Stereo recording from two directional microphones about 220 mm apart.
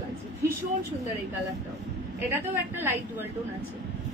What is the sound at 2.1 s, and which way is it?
A woman's voice, 10° right (ahead or behind).